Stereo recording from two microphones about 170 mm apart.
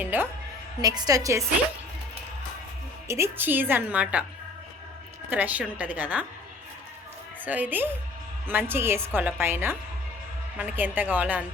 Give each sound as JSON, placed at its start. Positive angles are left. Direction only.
{"t": 0.0, "sound": "a woman's voice", "side_deg": -10}
{"t": 0.8, "sound": "a woman's voice", "side_deg": -20}
{"t": 3.1, "sound": "a woman's voice", "side_deg": -15}
{"t": 5.3, "sound": "a woman's voice", "side_deg": -10}
{"t": 7.4, "sound": "a woman's voice", "side_deg": -10}